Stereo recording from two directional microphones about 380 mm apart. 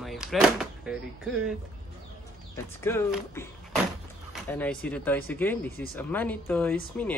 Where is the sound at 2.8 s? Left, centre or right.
Centre.